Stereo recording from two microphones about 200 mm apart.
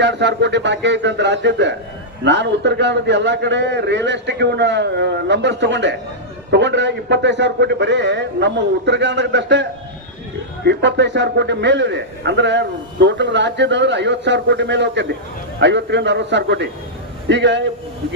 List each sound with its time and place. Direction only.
0.0 s a man's voice: 60° right (ahead or behind)
10.7 s a man's voice: 60° right (ahead or behind)